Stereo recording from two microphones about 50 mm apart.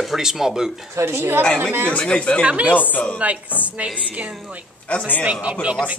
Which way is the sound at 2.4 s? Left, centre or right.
Right.